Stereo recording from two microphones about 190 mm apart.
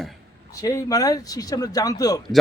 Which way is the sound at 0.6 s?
15° left (ahead or behind).